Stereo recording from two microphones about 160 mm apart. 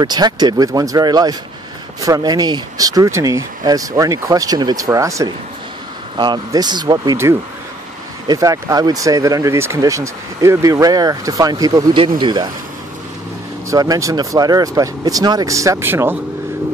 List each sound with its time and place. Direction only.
0.0 s speech: 25° right (ahead or behind)
13.7 s speech: 20° right (ahead or behind)